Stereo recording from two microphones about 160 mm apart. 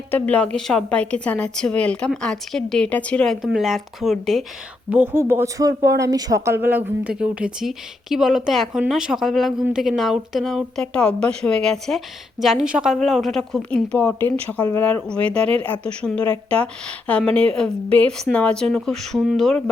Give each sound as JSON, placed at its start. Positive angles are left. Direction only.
{"t": 0.1, "sound": "a woman's voice", "side_deg": 10}
{"t": 4.9, "sound": "a woman's voice", "side_deg": -10}